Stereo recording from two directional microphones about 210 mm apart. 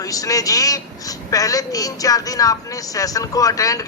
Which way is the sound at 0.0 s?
15° left (ahead or behind).